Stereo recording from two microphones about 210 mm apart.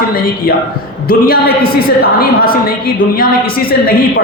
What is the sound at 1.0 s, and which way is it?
A woman's voice, 45° left (ahead or behind).